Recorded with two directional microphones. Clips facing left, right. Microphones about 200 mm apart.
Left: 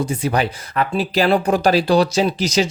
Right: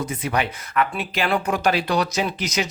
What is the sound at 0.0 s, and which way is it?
Speech, 30° left (ahead or behind).